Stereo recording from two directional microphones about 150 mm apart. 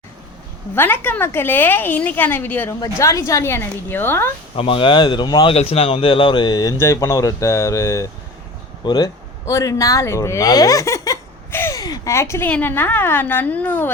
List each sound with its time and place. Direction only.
0.8 s a woman's voice: 10° left (ahead or behind)
4.5 s speech: 35° left (ahead or behind); by 13.9 s 10° left (ahead or behind)